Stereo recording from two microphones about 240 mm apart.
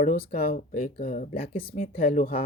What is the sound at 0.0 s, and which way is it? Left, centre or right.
Speech, left.